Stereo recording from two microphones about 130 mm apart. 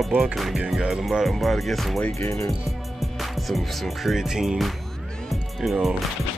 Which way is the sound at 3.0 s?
Centre (ahead or behind).